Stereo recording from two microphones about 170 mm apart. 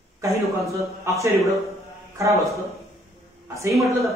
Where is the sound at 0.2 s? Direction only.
20° right (ahead or behind).